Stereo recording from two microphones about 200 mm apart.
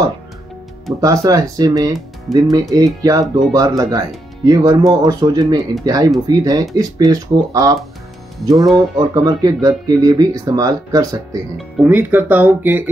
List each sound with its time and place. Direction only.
1.0 s speech: 15° right (ahead or behind)
2.0 s speech: centre (ahead or behind)
2.7 s speech: 15° right (ahead or behind)
11.5 s speech: 5° right (ahead or behind)